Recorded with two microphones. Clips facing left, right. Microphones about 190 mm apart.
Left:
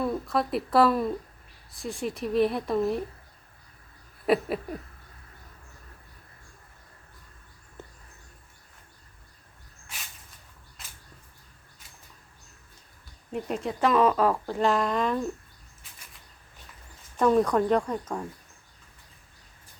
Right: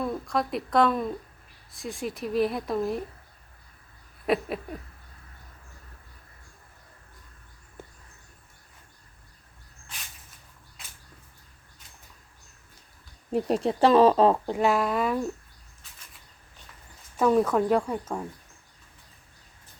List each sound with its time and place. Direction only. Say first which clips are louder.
0.0 s speech: left 1 dB; centre (ahead or behind)
4.3 s speech: left 2 dB; centre (ahead or behind)
7.8 s bird: even; 10° right (ahead or behind)
13.3 s speech: right 6 dB; 35° right (ahead or behind); by 15.3 s 10° right (ahead or behind)
17.2 s speech: even; 5° right (ahead or behind)